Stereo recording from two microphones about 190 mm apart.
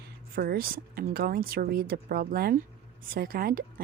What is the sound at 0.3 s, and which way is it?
A woman's voice, 50° right (ahead or behind).